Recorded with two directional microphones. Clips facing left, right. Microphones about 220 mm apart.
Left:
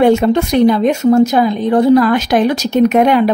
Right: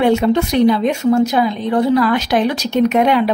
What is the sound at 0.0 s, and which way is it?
Speech, 45° left (ahead or behind).